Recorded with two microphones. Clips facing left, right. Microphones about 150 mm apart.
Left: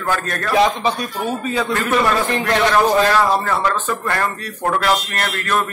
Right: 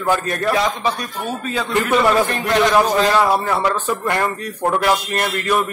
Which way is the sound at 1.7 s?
10° right (ahead or behind).